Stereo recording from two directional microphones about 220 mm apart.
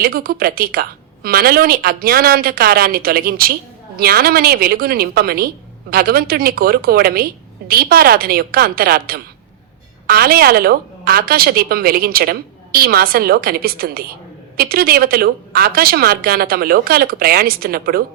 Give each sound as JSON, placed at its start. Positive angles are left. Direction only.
{"t": 0.0, "sound": "a woman's voice", "side_deg": -40}